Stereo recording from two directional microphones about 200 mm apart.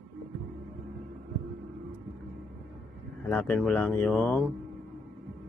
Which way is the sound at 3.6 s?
10° left (ahead or behind).